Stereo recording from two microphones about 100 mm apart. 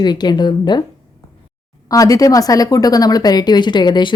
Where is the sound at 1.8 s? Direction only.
35° left (ahead or behind).